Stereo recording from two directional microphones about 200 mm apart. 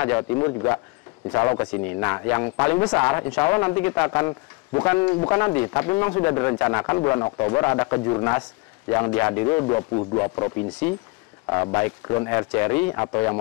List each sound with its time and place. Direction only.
0.0 s speech: 10° left (ahead or behind)